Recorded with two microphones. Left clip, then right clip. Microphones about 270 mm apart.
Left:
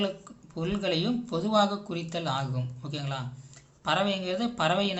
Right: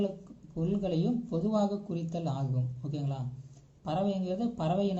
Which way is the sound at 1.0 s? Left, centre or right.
Left.